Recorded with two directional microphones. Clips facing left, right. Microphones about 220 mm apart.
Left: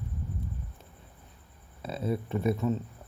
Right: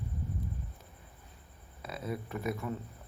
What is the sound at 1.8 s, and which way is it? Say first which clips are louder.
Speech: left 6 dB; 30° left (ahead or behind).